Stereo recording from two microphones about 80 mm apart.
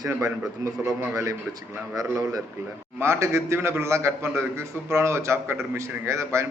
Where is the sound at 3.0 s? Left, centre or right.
Right.